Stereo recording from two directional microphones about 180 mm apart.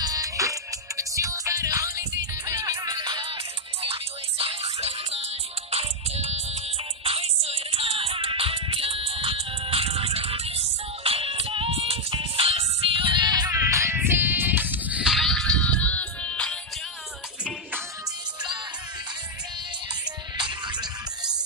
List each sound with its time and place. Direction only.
0.0 s music: 20° right (ahead or behind); by 16.5 s 5° left (ahead or behind)
20.3 s music: 25° right (ahead or behind)